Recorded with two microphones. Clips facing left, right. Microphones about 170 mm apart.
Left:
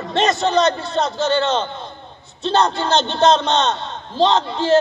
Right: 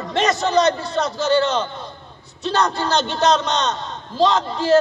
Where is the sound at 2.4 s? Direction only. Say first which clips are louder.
Left 2 dB; 25° left (ahead or behind).